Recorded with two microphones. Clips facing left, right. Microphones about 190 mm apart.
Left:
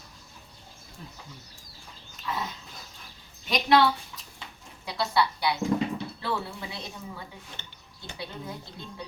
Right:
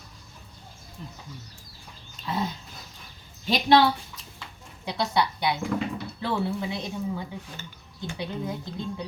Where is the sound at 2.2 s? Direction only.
30° right (ahead or behind).